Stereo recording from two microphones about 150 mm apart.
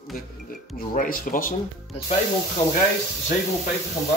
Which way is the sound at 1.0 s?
70° left (ahead or behind).